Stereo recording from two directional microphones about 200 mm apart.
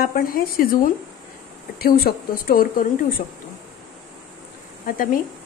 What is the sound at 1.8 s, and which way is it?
A woman's voice, 50° left (ahead or behind).